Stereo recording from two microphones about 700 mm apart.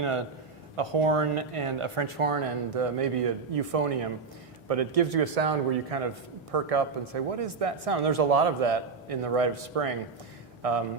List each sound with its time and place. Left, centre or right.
0.0 s speech: right